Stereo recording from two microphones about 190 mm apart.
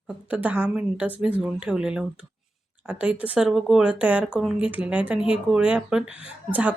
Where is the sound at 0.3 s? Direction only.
10° right (ahead or behind).